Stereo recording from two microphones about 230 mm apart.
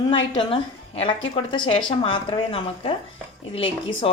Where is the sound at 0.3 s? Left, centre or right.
Left.